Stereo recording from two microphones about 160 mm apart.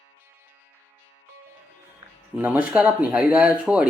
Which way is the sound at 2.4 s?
10° right (ahead or behind).